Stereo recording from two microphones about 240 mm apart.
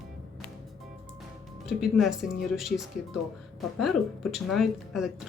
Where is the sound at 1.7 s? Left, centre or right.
Centre.